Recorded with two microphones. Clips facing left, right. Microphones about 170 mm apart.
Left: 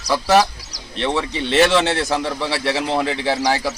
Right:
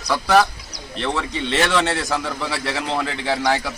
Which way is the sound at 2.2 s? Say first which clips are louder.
Left 3 dB; 30° left (ahead or behind).